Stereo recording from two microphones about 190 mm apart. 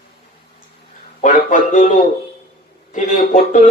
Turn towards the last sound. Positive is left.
turn(degrees=45)  # may be behind; listen again after turning